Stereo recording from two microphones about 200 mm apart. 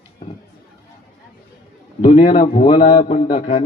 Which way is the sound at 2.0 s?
25° left (ahead or behind).